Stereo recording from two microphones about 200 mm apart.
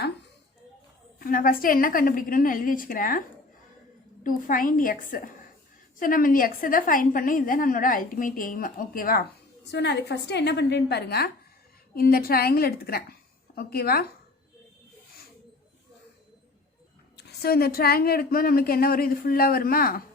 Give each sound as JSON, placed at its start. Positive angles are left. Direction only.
{"t": 1.2, "sound": "a woman's voice", "side_deg": 45}
{"t": 9.7, "sound": "a woman's voice", "side_deg": 60}
{"t": 17.2, "sound": "a woman's voice", "side_deg": 50}